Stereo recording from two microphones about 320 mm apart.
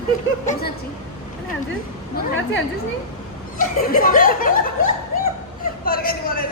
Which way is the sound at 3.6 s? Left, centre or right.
Left.